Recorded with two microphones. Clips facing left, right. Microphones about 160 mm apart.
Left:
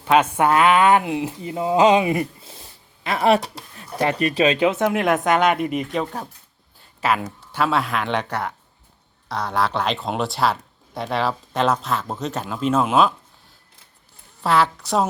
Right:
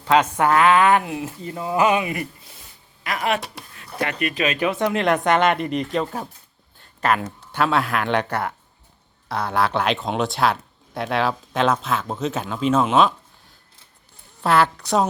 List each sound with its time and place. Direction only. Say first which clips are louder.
0.0 s speech: left 1 dB; 15° left (ahead or behind); by 4.6 s 30° left (ahead or behind)
4.6 s speech: left 2 dB; 15° left (ahead or behind)
14.4 s a woman's voice: right 1 dB; centre (ahead or behind)